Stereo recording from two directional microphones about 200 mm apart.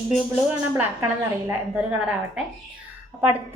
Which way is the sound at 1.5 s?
5° right (ahead or behind).